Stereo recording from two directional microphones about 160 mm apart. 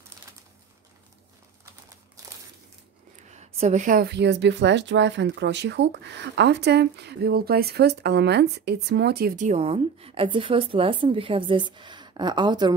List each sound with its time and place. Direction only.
2.2 s crumpling: 20° right (ahead or behind)
3.3 s a sound: 45° right (ahead or behind)
4.0 s speech: 90° right
9.4 s a woman's voice: 40° right (ahead or behind)